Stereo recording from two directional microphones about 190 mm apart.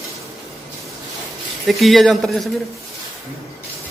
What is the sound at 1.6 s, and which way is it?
Speech, centre (ahead or behind).